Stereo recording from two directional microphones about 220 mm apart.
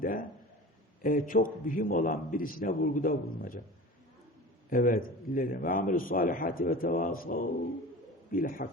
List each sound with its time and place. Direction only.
0.0 s a man's voice: 40° left (ahead or behind)
4.7 s a man's voice: 40° left (ahead or behind)